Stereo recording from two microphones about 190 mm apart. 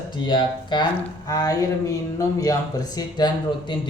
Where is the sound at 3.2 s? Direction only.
20° left (ahead or behind).